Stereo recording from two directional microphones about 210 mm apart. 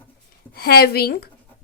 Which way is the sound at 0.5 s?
45° left (ahead or behind).